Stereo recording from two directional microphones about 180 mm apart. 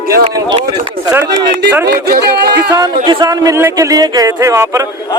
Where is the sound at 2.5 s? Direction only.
20° right (ahead or behind).